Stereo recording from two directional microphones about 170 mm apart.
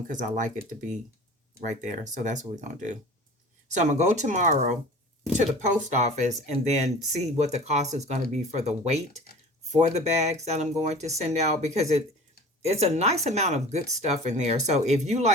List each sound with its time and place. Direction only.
0.1 s speech: 45° right (ahead or behind)